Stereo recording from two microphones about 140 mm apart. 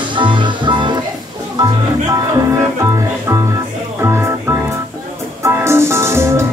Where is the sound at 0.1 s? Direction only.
35° right (ahead or behind).